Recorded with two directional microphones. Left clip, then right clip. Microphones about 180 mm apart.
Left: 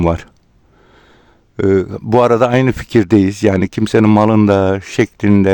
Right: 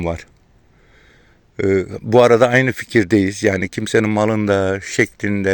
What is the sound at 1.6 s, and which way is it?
Speech, 35° left (ahead or behind).